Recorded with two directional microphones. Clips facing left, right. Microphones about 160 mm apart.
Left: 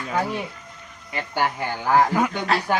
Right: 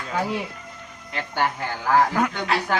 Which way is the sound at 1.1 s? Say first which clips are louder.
Even; 10° left (ahead or behind).